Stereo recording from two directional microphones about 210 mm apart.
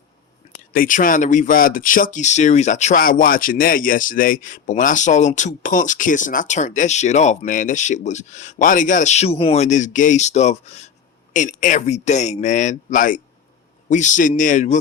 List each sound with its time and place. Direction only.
0.5 s speech: 40° left (ahead or behind)